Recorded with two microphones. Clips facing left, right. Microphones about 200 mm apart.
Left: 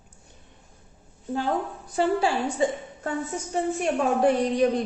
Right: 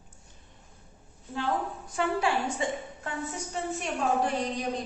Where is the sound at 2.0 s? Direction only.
35° left (ahead or behind).